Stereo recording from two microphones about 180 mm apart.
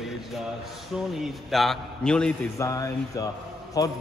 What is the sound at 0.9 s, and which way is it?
A man's voice, centre (ahead or behind).